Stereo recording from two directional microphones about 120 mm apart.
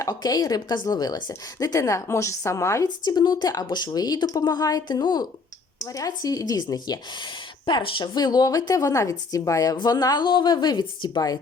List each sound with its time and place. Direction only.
0.0 s a woman's voice: 35° left (ahead or behind)
2.8 s speech: 35° left (ahead or behind)